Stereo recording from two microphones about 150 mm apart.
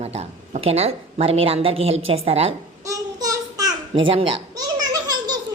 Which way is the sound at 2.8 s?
25° right (ahead or behind).